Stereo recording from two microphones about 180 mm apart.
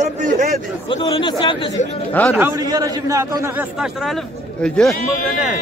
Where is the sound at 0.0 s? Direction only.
45° right (ahead or behind).